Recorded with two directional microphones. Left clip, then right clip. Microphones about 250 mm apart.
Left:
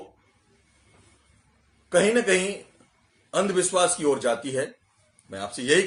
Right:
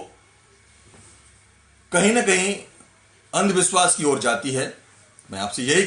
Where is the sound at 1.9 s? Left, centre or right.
Centre.